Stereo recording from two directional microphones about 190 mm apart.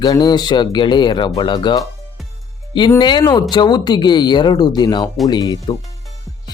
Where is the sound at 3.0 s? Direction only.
25° left (ahead or behind).